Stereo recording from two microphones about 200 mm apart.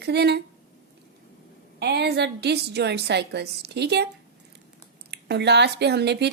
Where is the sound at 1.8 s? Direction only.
55° right (ahead or behind).